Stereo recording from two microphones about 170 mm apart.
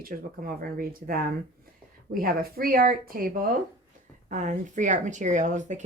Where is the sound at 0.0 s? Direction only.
60° right (ahead or behind).